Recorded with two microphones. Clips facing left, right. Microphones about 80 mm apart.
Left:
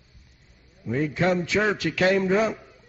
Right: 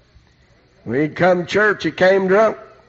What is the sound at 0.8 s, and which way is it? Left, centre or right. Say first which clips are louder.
A man's voice: right 8 dB; right.